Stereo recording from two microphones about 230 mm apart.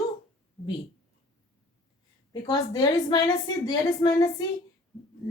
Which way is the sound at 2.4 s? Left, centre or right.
Centre.